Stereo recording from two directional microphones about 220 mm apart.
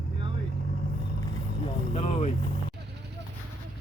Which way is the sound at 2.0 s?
30° left (ahead or behind).